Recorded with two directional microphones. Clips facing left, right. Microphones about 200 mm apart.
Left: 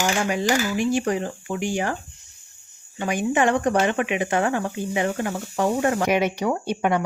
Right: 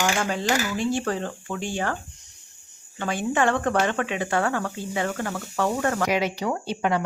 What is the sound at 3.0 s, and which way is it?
Speech, 15° left (ahead or behind).